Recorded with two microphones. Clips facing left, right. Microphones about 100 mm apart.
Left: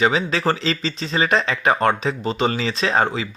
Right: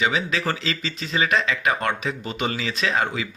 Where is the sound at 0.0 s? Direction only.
35° left (ahead or behind).